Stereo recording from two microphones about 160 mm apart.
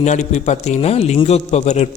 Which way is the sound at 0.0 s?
45° left (ahead or behind).